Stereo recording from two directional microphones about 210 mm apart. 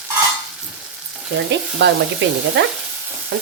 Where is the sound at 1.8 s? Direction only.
55° right (ahead or behind).